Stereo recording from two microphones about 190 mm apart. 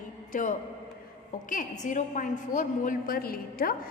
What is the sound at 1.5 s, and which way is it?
A woman's voice, 45° left (ahead or behind).